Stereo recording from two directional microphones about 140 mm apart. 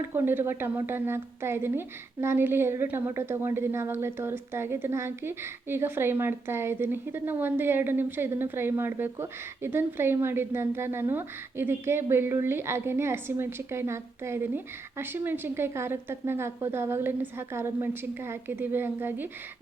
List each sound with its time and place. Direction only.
0.1 s a woman's voice: 15° right (ahead or behind)